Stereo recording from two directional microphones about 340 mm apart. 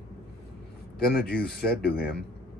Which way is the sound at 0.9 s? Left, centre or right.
Left.